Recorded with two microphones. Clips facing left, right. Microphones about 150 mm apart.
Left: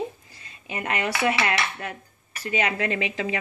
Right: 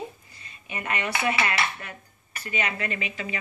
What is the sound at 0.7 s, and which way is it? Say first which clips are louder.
Speech: left 3 dB; 90° left.